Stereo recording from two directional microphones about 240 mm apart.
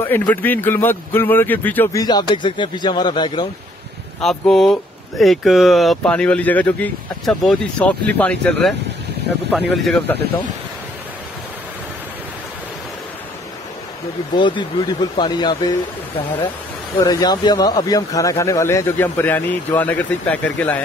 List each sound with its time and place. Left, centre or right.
0.0 s speech: centre
4.2 s speech: centre
9.8 s speech: centre
14.3 s speech: centre
17.0 s speech: centre